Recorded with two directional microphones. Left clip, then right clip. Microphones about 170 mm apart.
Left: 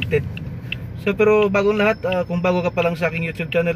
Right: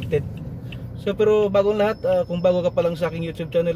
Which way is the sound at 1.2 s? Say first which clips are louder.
Left 1 dB; 40° left (ahead or behind).